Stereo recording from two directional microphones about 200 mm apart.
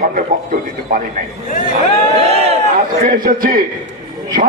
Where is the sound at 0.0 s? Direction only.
45° right (ahead or behind).